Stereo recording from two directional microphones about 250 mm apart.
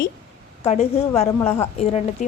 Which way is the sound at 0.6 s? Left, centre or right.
Left.